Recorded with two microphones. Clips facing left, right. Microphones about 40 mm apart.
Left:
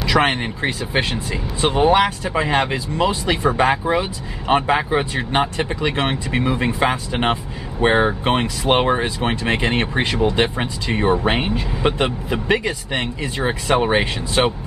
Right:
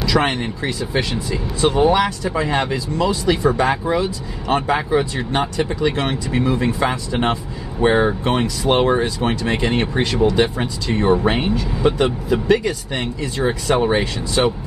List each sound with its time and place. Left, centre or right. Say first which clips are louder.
0.0 s speech: left 1 dB; left
1.1 s speech: right 2 dB; left
11.8 s speech: right 2 dB; left